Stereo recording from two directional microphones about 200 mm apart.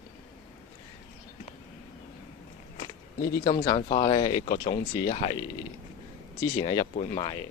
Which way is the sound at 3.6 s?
25° left (ahead or behind).